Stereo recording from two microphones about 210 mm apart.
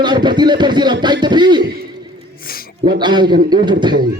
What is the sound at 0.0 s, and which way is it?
A man's voice, 20° right (ahead or behind).